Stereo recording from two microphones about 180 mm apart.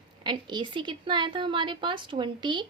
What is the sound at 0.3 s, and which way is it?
A woman's voice, 25° right (ahead or behind).